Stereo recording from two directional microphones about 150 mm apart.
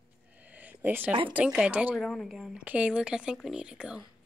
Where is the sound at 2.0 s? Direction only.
Centre (ahead or behind).